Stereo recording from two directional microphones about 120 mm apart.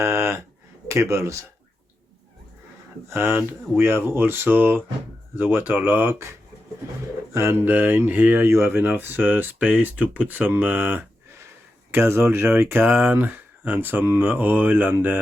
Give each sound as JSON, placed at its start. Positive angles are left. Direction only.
{"t": 0.0, "sound": "a sound", "side_deg": -20}
{"t": 0.9, "sound": "speech", "side_deg": -25}
{"t": 3.1, "sound": "speech", "side_deg": -20}
{"t": 7.3, "sound": "speech", "side_deg": -20}